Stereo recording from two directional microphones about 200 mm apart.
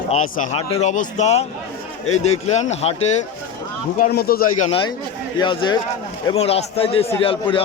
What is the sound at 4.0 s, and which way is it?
Speech, 50° left (ahead or behind).